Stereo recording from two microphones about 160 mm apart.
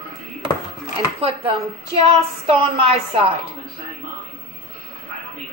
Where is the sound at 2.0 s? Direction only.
35° right (ahead or behind).